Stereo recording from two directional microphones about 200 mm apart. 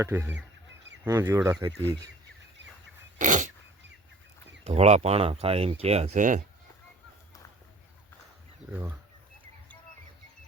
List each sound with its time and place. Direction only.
0.0 s speech: 10° right (ahead or behind)
3.2 s a sound: 40° right (ahead or behind)
4.6 s speech: 30° right (ahead or behind)
8.7 s speech: 15° right (ahead or behind)